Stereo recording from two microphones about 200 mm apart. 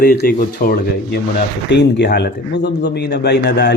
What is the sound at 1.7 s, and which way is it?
A man's voice, 60° left (ahead or behind).